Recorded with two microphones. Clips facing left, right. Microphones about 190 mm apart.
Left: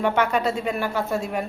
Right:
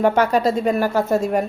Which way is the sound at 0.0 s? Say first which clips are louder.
Right 5 dB; 40° right (ahead or behind).